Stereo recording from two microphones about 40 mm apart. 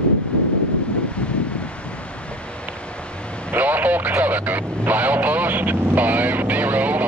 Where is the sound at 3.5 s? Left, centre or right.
Right.